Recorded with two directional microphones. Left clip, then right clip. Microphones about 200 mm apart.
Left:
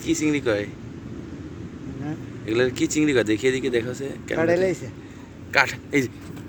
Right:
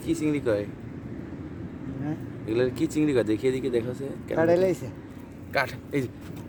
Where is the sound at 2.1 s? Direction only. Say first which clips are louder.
Left 3 dB; 10° right (ahead or behind).